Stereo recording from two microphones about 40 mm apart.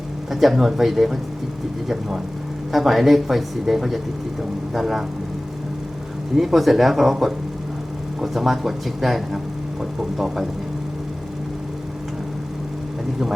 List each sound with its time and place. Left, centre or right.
0.3 s speech: centre
6.3 s speech: centre